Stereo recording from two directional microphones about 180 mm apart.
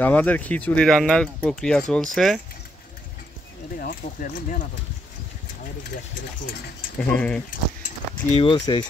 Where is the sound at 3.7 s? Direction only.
50° left (ahead or behind).